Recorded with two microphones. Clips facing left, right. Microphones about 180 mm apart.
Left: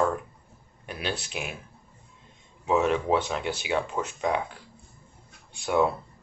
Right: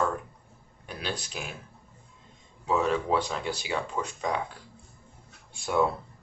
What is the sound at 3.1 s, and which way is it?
Speech, 15° left (ahead or behind).